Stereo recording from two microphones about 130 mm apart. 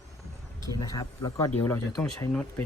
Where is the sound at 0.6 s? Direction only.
30° left (ahead or behind).